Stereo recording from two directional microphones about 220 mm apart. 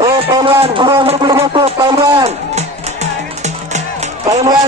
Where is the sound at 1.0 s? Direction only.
25° right (ahead or behind).